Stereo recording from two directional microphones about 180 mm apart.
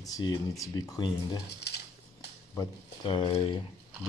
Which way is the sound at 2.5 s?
25° left (ahead or behind).